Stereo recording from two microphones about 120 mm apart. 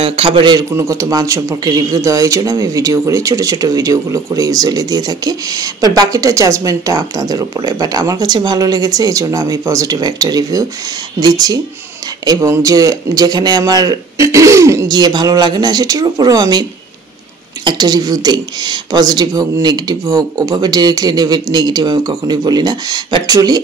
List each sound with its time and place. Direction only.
0.0 s a man's voice: 50° right (ahead or behind)
0.7 s speech: 25° right (ahead or behind)
17.6 s speech: 35° right (ahead or behind)